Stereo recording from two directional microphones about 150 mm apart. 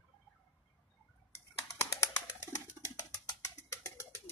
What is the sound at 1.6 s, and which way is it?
Bird, 20° left (ahead or behind).